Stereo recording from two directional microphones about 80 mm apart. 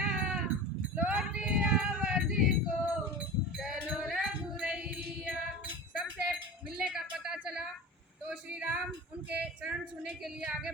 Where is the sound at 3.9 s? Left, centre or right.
Centre.